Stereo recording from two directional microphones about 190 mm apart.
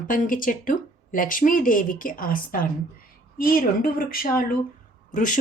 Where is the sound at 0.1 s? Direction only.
45° left (ahead or behind).